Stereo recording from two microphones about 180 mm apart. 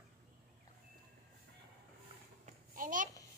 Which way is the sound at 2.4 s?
45° right (ahead or behind).